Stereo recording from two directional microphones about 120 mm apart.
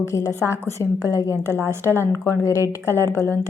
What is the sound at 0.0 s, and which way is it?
A woman's voice, 25° left (ahead or behind).